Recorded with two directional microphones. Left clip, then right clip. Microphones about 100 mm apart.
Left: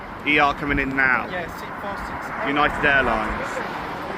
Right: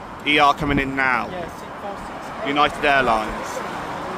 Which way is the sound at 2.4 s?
50° right (ahead or behind).